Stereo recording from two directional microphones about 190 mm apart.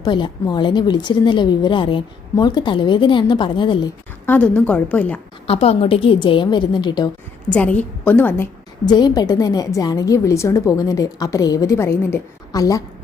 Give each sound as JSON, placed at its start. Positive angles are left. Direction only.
{"t": 0.0, "sound": "a woman's voice", "side_deg": 25}
{"t": 4.3, "sound": "a woman's voice", "side_deg": 5}
{"t": 5.5, "sound": "a woman's voice", "side_deg": 30}
{"t": 7.5, "sound": "a woman's voice", "side_deg": 5}
{"t": 8.9, "sound": "a woman's voice", "side_deg": 20}